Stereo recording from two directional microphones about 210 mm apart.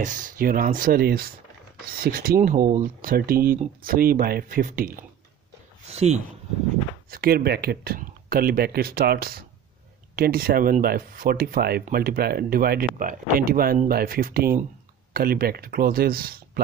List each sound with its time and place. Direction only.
0.0 s speech: 40° right (ahead or behind)
5.9 s speech: 30° right (ahead or behind)
7.1 s speech: 45° right (ahead or behind)